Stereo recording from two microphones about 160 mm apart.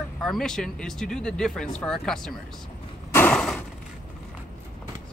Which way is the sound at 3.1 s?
10° left (ahead or behind).